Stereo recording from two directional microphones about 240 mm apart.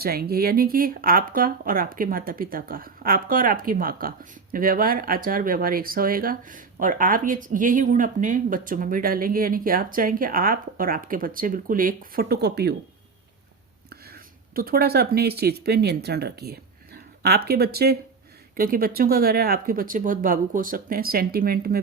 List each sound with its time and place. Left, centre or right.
0.0 s speech: right
13.9 s speech: right